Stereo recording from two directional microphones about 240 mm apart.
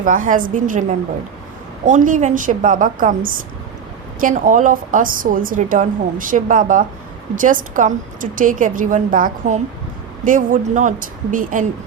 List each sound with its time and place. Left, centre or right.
0.0 s a woman's voice: right